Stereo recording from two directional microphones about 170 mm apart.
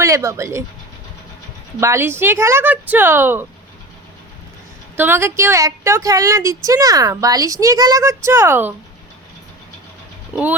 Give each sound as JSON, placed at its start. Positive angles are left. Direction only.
{"t": 0.0, "sound": "speech", "side_deg": -15}
{"t": 1.8, "sound": "speech", "side_deg": -15}
{"t": 4.9, "sound": "speech", "side_deg": -15}
{"t": 10.3, "sound": "speech", "side_deg": -10}